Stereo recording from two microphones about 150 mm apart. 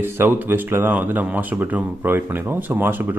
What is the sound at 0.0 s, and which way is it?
Speech, 15° right (ahead or behind).